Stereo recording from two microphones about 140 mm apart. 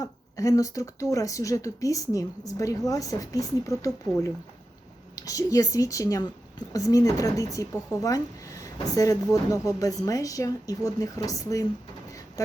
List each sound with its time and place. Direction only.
0.0 s speech: 25° left (ahead or behind)